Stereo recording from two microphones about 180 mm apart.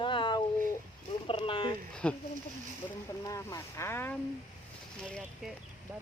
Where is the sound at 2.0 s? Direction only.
5° left (ahead or behind).